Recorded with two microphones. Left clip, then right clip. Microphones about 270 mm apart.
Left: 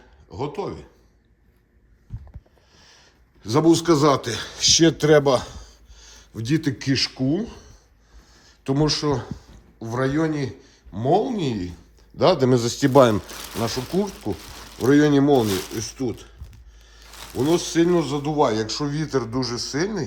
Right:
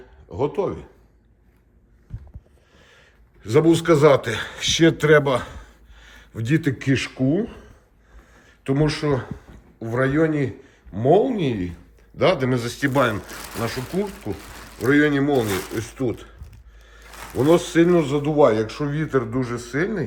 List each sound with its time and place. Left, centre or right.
0.3 s speech: centre
2.7 s a man's voice: centre
14.5 s speech: centre
15.5 s a man's voice: centre